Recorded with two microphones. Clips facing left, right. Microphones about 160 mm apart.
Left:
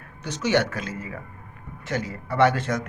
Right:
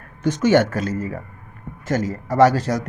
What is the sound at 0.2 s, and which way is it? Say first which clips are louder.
A man's voice: right 7 dB; 50° right (ahead or behind).